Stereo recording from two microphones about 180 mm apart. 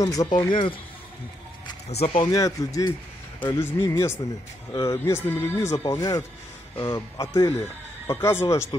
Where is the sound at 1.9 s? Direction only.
35° left (ahead or behind).